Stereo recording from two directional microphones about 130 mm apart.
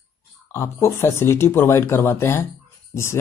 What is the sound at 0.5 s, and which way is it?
Speech, 20° left (ahead or behind).